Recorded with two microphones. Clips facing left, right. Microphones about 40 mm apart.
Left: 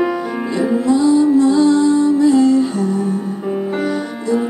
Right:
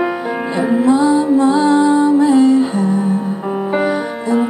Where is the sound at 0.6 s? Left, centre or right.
Right.